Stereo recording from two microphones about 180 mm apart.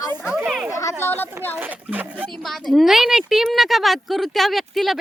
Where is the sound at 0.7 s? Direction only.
15° left (ahead or behind).